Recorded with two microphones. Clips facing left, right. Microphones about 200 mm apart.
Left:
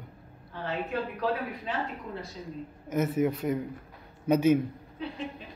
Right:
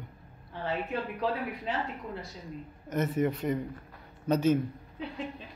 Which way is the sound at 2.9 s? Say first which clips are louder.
Left 2 dB; 5° left (ahead or behind).